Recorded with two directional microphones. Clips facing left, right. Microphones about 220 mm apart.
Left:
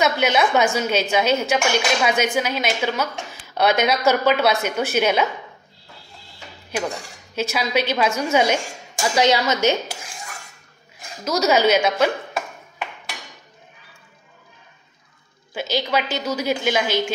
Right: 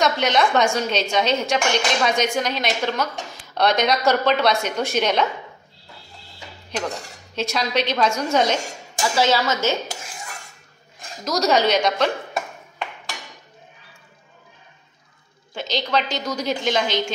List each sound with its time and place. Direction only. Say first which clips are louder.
0.0 s a woman's voice: left 1 dB; 5° left (ahead or behind)
7.3 s a woman's voice: left 1 dB; 5° left (ahead or behind)
11.2 s a woman's voice: left 2 dB; 5° left (ahead or behind)
15.5 s a woman's voice: left 1 dB; 5° left (ahead or behind)